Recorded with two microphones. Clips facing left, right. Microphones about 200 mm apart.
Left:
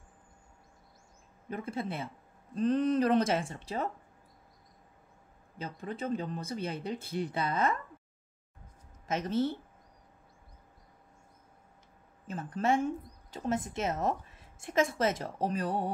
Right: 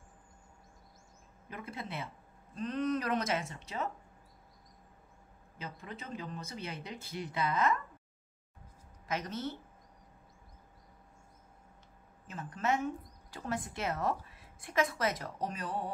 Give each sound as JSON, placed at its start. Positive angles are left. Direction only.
{"t": 1.5, "sound": "speech", "side_deg": 30}
{"t": 5.6, "sound": "speech", "side_deg": 30}
{"t": 9.0, "sound": "speech", "side_deg": 25}
{"t": 12.3, "sound": "speech", "side_deg": 30}